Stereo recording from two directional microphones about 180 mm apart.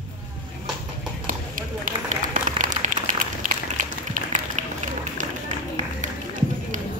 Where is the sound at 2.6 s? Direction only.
45° right (ahead or behind).